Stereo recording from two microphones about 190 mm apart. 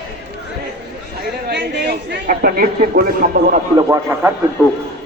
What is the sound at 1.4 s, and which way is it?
Chatter, 60° right (ahead or behind).